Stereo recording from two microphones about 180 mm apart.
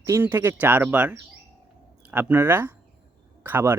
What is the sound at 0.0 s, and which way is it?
Speech, 10° right (ahead or behind).